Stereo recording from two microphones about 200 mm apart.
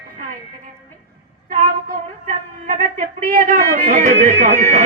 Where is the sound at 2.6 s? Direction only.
40° right (ahead or behind).